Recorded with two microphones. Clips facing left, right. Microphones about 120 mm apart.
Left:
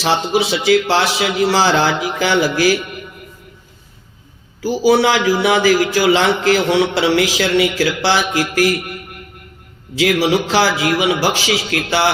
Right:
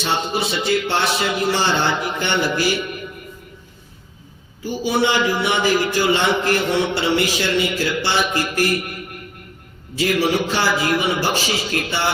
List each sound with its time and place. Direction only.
0.0 s a man's voice: 90° left
4.6 s a man's voice: 90° left
10.0 s a man's voice: 90° left